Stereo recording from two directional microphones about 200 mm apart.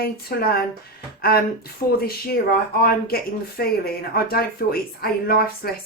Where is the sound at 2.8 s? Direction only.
50° left (ahead or behind).